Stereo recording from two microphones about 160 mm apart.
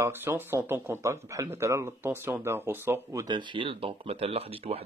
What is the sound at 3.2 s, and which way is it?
Speech, 30° right (ahead or behind).